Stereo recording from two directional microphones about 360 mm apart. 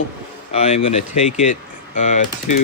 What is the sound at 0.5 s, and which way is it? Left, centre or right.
Speech, centre.